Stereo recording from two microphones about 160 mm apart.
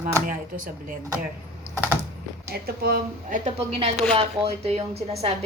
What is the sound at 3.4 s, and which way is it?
Speech, 35° right (ahead or behind).